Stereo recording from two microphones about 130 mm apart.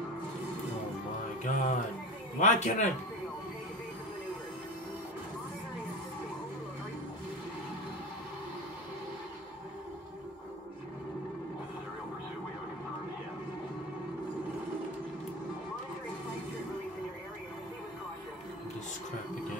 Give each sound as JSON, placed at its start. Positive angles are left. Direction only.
{"t": 1.4, "sound": "a man's voice", "side_deg": 75}